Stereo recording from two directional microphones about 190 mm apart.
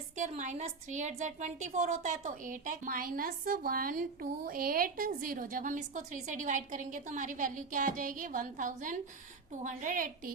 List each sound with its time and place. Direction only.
0.2 s a woman's voice: 40° right (ahead or behind)